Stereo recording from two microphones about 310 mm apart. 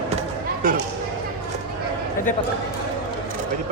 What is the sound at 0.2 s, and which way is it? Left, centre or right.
Chop, right.